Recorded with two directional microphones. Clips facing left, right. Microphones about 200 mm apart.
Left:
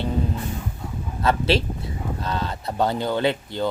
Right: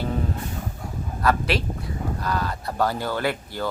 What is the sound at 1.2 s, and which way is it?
Speech, 25° left (ahead or behind).